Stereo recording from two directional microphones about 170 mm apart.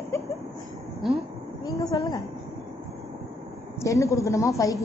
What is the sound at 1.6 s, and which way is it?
Speech, 20° left (ahead or behind).